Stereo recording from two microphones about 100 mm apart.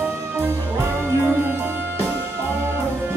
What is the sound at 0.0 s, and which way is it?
Music, 25° right (ahead or behind).